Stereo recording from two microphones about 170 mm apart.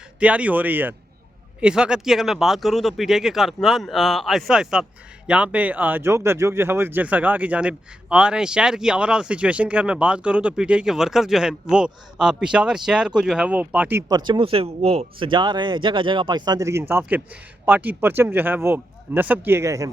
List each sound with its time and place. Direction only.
0.2 s speech: 10° right (ahead or behind)
14.1 s speech: 25° right (ahead or behind)